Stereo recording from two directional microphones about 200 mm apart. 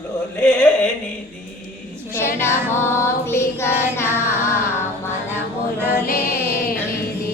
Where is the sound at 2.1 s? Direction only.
10° left (ahead or behind).